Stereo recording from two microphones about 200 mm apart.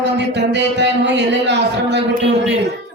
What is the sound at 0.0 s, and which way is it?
A woman's voice, 60° right (ahead or behind).